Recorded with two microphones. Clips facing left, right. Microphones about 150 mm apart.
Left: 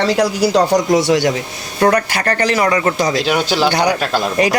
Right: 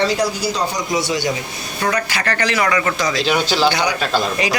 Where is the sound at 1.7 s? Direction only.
50° left (ahead or behind).